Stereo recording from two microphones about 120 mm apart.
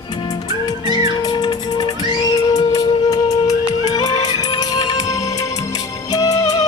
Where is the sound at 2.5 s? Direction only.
30° left (ahead or behind).